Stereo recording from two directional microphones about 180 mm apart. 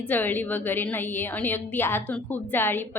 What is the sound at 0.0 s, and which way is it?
A woman's voice, 10° left (ahead or behind).